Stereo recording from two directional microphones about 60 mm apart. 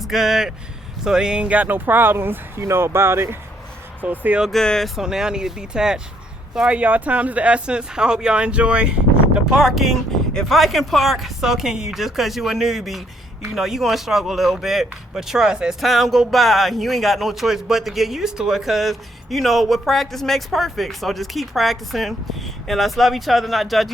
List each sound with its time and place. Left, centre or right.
0.0 s a man's voice: centre
1.6 s speech: right
4.0 s speech: right
4.5 s speech: centre
4.9 s speech: centre
6.7 s a man's voice: right
15.8 s a man's voice: centre